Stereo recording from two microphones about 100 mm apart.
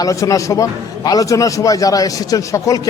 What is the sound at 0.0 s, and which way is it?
A man's voice, 35° left (ahead or behind).